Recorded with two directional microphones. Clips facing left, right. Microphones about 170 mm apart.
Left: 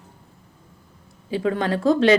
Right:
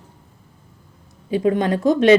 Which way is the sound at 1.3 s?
20° right (ahead or behind).